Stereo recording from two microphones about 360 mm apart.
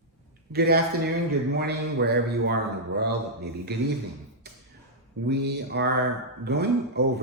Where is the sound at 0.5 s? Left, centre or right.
Right.